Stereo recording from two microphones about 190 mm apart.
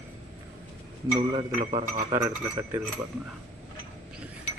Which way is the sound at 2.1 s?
15° right (ahead or behind).